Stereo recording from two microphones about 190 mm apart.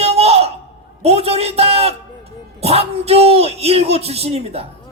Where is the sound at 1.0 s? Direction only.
30° right (ahead or behind).